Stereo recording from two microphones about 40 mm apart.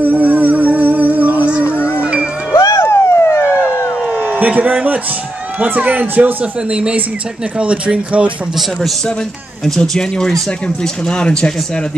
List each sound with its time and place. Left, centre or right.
0.0 s music: right
1.8 s music: left
2.5 s vehicle: left
4.1 s a sound: right
5.6 s speech: right
9.8 s speech: centre